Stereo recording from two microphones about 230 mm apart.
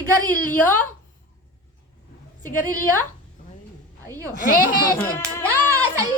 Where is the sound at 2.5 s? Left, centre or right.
Left.